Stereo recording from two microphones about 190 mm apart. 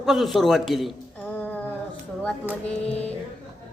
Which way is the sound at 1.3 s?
10° left (ahead or behind).